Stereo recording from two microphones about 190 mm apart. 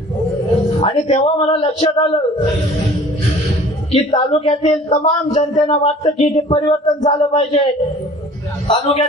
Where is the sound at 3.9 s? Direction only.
30° left (ahead or behind).